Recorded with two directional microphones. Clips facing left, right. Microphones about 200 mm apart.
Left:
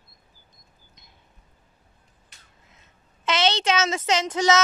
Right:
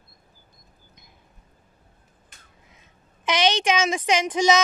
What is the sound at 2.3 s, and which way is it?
Crow, 50° right (ahead or behind).